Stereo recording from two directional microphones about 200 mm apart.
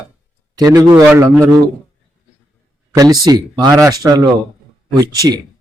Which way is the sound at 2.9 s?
20° right (ahead or behind).